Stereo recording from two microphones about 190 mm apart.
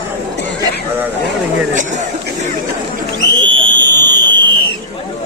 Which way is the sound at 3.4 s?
25° right (ahead or behind).